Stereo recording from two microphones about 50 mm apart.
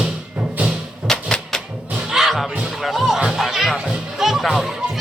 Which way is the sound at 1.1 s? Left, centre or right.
Centre.